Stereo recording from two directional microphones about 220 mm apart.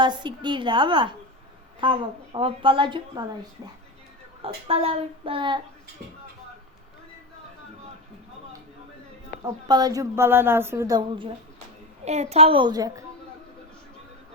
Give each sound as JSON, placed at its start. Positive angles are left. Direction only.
{"t": 0.0, "sound": "a woman's voice", "side_deg": -20}
{"t": 4.4, "sound": "a woman's voice", "side_deg": -25}
{"t": 9.4, "sound": "a woman's voice", "side_deg": -15}